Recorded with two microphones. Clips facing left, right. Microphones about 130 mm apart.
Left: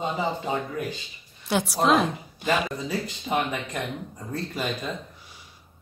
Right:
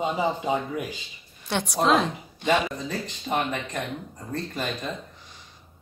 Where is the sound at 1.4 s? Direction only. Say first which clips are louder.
Left 1 dB; 5° left (ahead or behind).